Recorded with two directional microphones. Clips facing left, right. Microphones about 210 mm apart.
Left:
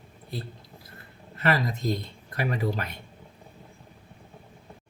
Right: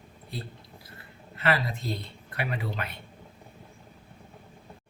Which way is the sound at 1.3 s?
40° left (ahead or behind).